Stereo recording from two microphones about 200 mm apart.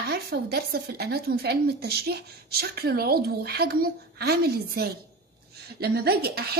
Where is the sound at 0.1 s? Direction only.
50° right (ahead or behind).